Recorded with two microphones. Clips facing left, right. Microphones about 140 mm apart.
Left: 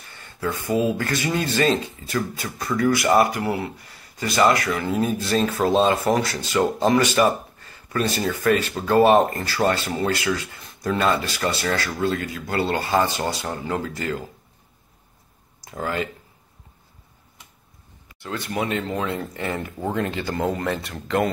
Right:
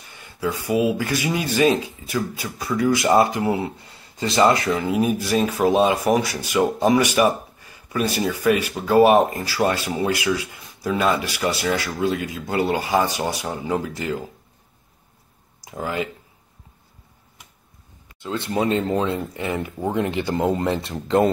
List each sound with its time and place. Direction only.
0.0 s speech: 15° right (ahead or behind)
15.6 s speech: 15° right (ahead or behind)
18.2 s speech: 25° right (ahead or behind)
19.1 s speech: 20° right (ahead or behind)